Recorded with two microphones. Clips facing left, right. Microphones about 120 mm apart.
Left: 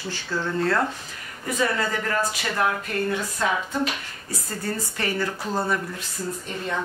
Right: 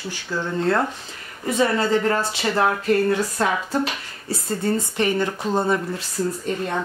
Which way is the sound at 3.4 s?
45° right (ahead or behind).